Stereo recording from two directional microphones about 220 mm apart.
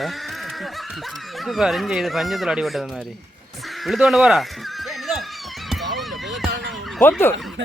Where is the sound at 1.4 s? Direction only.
Centre (ahead or behind).